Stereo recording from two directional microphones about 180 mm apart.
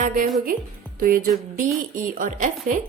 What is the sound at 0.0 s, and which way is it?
A woman's voice, 45° right (ahead or behind).